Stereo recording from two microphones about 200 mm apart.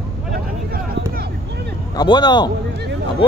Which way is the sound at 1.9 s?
20° left (ahead or behind).